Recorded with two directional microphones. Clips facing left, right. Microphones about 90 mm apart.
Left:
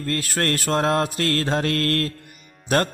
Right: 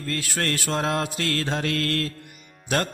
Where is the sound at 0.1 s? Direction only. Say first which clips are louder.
Left 3 dB; 45° left (ahead or behind).